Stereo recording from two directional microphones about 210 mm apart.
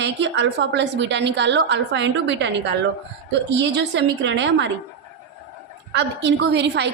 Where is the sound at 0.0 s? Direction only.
55° right (ahead or behind).